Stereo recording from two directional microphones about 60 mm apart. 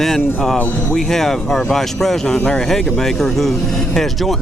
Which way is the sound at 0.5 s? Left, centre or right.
Left.